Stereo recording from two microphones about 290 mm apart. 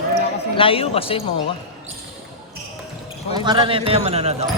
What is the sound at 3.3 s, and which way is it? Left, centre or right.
Speech, centre.